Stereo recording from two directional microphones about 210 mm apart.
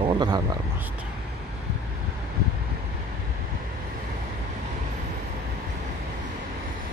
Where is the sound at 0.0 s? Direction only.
20° right (ahead or behind).